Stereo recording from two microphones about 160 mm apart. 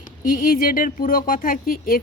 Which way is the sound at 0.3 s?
60° left (ahead or behind).